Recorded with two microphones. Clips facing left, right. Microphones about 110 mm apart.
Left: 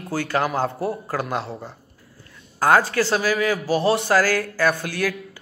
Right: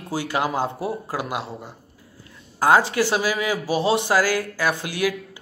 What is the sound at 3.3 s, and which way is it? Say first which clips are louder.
Speech: left 2 dB; 25° right (ahead or behind).